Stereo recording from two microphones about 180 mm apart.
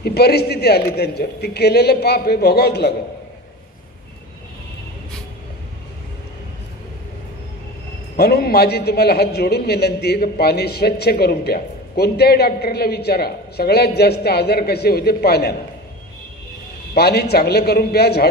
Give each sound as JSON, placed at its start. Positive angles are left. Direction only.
{"t": 0.0, "sound": "a man's voice", "side_deg": 60}
{"t": 8.2, "sound": "a man's voice", "side_deg": 60}
{"t": 16.9, "sound": "a man's voice", "side_deg": 60}